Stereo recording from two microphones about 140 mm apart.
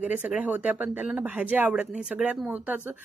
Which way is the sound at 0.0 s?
10° right (ahead or behind).